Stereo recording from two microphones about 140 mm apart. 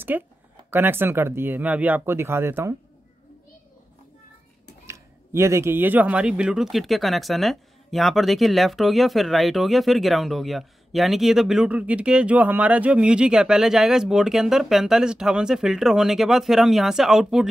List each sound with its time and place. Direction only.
0.1 s speech: 15° right (ahead or behind)
4.8 s speech: 20° right (ahead or behind); by 17.5 s centre (ahead or behind)